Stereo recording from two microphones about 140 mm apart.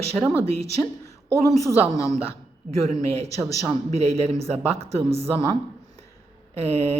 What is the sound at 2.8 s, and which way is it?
Speech, 50° right (ahead or behind).